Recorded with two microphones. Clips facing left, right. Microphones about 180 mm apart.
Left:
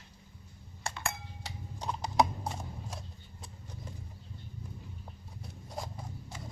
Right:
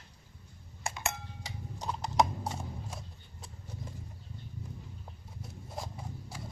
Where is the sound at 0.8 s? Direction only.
20° right (ahead or behind).